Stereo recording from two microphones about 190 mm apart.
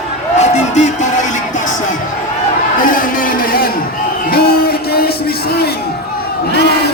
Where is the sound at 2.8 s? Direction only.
45° left (ahead or behind).